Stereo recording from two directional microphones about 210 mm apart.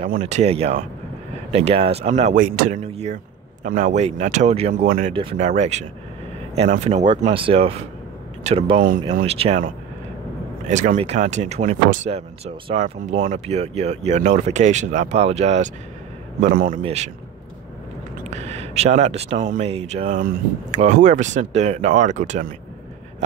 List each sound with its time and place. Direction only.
0.2 s speech: 30° right (ahead or behind)
10.7 s speech: 35° right (ahead or behind)
18.3 s speech: 30° right (ahead or behind)